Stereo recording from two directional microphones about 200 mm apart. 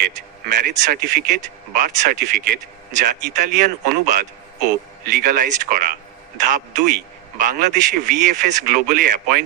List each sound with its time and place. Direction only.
0.0 s a man's voice: 45° right (ahead or behind)